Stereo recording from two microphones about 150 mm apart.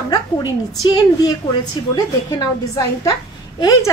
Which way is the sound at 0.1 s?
30° left (ahead or behind).